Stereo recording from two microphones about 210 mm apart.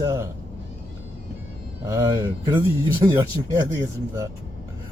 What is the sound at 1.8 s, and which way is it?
Speech, 15° right (ahead or behind).